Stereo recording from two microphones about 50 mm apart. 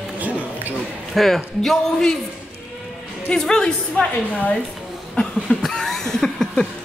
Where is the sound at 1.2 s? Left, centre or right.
Centre.